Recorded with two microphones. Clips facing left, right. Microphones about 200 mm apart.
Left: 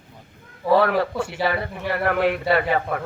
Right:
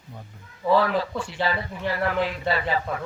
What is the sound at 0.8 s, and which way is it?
A man's voice, 60° left (ahead or behind).